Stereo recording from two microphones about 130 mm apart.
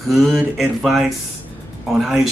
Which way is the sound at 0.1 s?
Centre (ahead or behind).